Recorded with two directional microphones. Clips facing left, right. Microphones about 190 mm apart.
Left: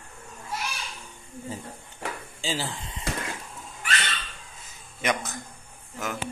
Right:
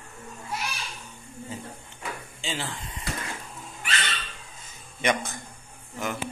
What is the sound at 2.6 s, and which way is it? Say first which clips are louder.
Speech: left 1 dB; 30° left (ahead or behind).